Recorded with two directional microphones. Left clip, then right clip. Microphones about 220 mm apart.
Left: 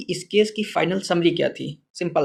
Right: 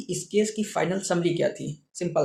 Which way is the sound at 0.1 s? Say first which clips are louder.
Left 5 dB; 30° left (ahead or behind).